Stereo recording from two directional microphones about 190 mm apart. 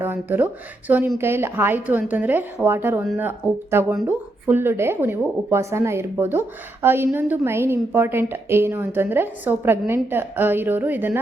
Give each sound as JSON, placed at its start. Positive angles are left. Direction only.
{"t": 0.0, "sound": "a woman's voice", "side_deg": -10}